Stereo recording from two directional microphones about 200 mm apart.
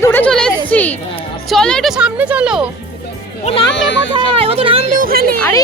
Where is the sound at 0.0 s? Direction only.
10° left (ahead or behind).